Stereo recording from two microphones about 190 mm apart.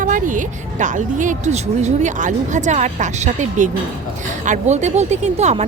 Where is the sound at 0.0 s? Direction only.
45° right (ahead or behind).